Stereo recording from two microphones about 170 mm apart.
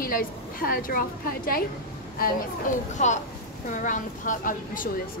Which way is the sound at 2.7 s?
50° left (ahead or behind).